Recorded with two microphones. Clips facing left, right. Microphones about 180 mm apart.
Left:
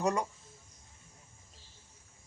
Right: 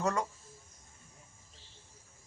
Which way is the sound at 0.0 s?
15° left (ahead or behind).